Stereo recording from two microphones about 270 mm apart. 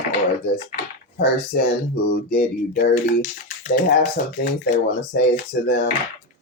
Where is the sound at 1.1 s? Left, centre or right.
Left.